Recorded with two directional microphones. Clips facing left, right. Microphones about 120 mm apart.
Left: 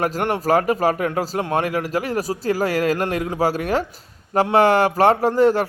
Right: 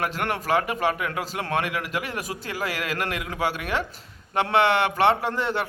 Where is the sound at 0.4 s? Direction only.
40° left (ahead or behind).